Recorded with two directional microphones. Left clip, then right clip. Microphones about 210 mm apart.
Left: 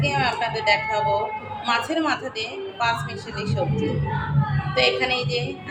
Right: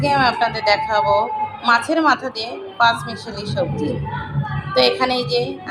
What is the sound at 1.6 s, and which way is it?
A woman's voice, 20° right (ahead or behind).